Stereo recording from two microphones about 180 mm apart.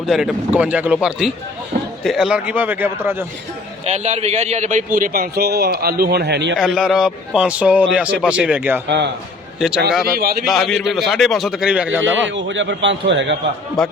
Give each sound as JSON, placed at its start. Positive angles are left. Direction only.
{"t": 0.1, "sound": "a man's voice", "side_deg": 0}
{"t": 3.8, "sound": "a man's voice", "side_deg": -40}
{"t": 6.6, "sound": "a man's voice", "side_deg": 0}
{"t": 10.2, "sound": "a man's voice", "side_deg": -60}
{"t": 10.4, "sound": "speech", "side_deg": 0}
{"t": 12.3, "sound": "a man's voice", "side_deg": -90}
{"t": 13.8, "sound": "speech", "side_deg": 0}